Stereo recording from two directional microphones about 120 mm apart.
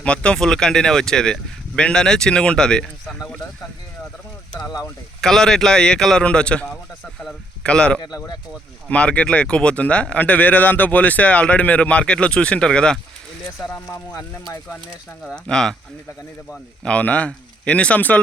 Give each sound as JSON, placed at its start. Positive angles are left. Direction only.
{"t": 0.0, "sound": "speech", "side_deg": 10}
{"t": 4.6, "sound": "speech", "side_deg": 30}
{"t": 5.2, "sound": "speech", "side_deg": 5}
{"t": 15.3, "sound": "speech", "side_deg": 5}